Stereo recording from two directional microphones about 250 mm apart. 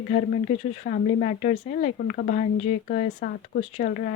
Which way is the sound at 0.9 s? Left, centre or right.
Left.